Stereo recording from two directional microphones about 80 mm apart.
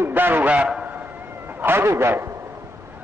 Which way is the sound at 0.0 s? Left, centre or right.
Right.